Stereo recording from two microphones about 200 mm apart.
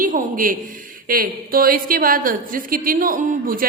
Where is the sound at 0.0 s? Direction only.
45° right (ahead or behind).